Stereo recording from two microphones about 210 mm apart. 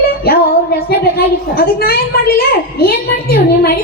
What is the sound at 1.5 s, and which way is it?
A woman's voice, 45° left (ahead or behind).